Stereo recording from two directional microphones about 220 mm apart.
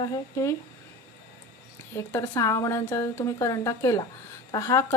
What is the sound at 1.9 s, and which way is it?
Speech, 10° left (ahead or behind).